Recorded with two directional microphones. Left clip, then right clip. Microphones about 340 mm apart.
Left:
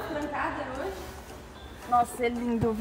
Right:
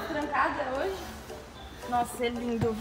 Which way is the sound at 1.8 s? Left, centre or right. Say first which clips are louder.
Left 4 dB; centre.